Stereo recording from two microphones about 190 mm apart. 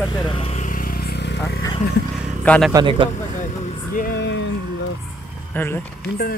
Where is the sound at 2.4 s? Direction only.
5° left (ahead or behind).